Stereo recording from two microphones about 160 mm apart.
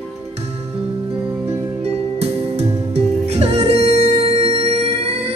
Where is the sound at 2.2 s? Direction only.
40° right (ahead or behind).